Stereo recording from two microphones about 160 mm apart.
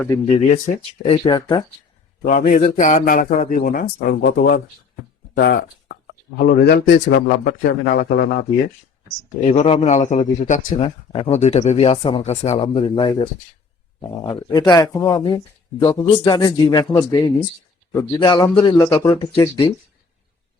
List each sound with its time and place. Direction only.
0.3 s speech: 45° left (ahead or behind)
1.0 s speech: 30° left (ahead or behind)
2.2 s speech: 50° left (ahead or behind)
3.6 s speech: 65° left (ahead or behind)
9.4 s speech: 45° left (ahead or behind)
10.8 s speech: 35° left (ahead or behind)